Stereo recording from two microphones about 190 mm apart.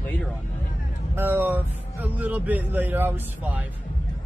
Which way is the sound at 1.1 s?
10° right (ahead or behind).